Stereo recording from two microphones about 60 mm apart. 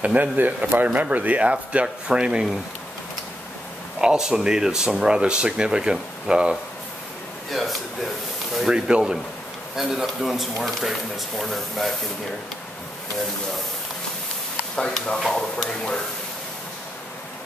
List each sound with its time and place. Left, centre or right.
0.0 s speech: right
4.0 s speech: centre
8.5 s speech: centre
14.8 s speech: centre